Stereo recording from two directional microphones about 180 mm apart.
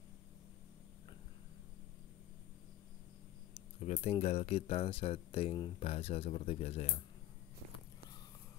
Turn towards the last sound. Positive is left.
turn(degrees=35)  # may be behind; listen again after turning